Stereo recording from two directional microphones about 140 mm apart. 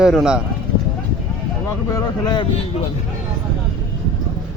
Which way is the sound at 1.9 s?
25° left (ahead or behind).